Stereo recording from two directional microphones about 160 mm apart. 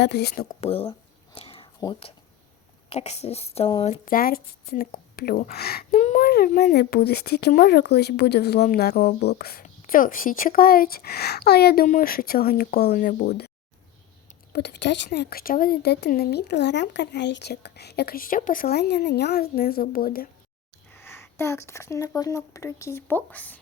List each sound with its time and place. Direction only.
0.0 s speech: 90° left
0.4 s speech: 40° left (ahead or behind)
1.4 s a sound: 35° left (ahead or behind)
2.9 s speech: 45° left (ahead or behind)
4.0 s speech: 65° left (ahead or behind)
6.0 s child singing: 50° left (ahead or behind)
6.2 s speech: 65° left (ahead or behind); by 8.6 s 90° left
8.6 s speech: 80° left
9.6 s speech: 60° left (ahead or behind); by 11.9 s 80° left
11.9 s speech: 65° left (ahead or behind); by 13.5 s 80° left
14.5 s speech: 90° left; by 20.2 s 65° left (ahead or behind)
20.9 s speech: 15° left (ahead or behind)